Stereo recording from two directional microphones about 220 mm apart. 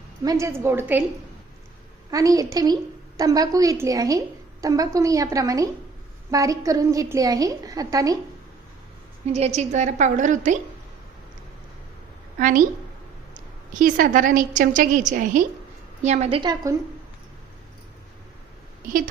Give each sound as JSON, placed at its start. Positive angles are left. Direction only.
{"t": 0.3, "sound": "a woman's voice", "side_deg": -15}
{"t": 2.0, "sound": "a woman's voice", "side_deg": -15}
{"t": 9.2, "sound": "a woman's voice", "side_deg": -30}
{"t": 12.4, "sound": "a woman's voice", "side_deg": -35}
{"t": 13.7, "sound": "a woman's voice", "side_deg": -40}